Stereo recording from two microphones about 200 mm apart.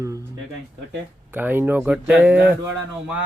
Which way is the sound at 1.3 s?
10° right (ahead or behind).